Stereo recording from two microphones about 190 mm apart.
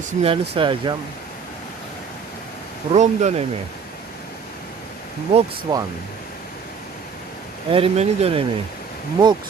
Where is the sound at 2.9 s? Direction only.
40° right (ahead or behind).